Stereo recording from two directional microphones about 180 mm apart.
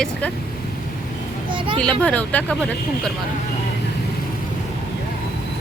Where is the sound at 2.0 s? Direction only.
5° left (ahead or behind).